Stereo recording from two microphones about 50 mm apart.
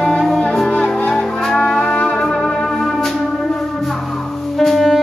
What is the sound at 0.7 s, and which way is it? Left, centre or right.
Music, centre.